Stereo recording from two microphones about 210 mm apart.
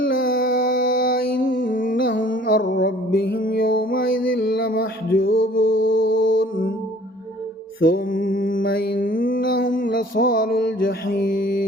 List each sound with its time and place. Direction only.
0.0 s a sound: 45° left (ahead or behind)
2.1 s music: 40° left (ahead or behind)
7.8 s music: 45° left (ahead or behind)